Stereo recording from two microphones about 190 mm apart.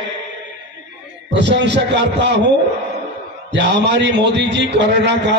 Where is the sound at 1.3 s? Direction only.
65° right (ahead or behind).